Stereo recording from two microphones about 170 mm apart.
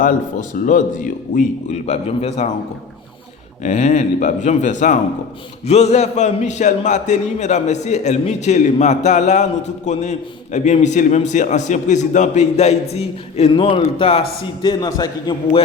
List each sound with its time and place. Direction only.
0.0 s a man's voice: 55° left (ahead or behind)
3.6 s a man's voice: 45° left (ahead or behind); by 15.4 s 20° left (ahead or behind)